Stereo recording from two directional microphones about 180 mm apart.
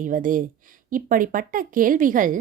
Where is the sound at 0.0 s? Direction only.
45° right (ahead or behind).